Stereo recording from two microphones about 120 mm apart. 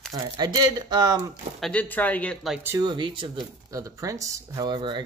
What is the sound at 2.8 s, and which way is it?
Speech, 40° right (ahead or behind).